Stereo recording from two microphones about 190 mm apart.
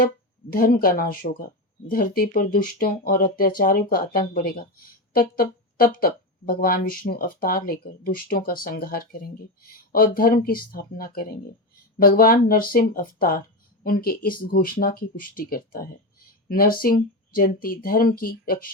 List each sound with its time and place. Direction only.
0.5 s speech: 50° left (ahead or behind)